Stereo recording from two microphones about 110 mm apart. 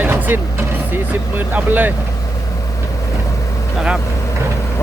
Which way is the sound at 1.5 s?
15° right (ahead or behind).